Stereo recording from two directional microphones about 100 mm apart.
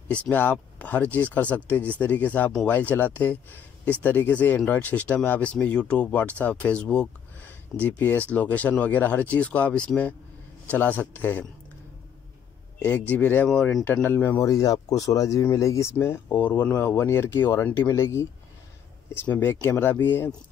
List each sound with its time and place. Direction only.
0.1 s speech: 15° left (ahead or behind)
13.1 s speech: 20° left (ahead or behind)
13.5 s speech: 5° left (ahead or behind)
13.8 s speech: 20° left (ahead or behind)
14.4 s speech: 35° left (ahead or behind); by 20.3 s 20° left (ahead or behind)